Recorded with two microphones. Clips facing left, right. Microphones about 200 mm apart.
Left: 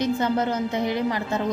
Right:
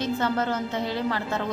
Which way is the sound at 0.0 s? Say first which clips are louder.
Left 3 dB; 15° left (ahead or behind).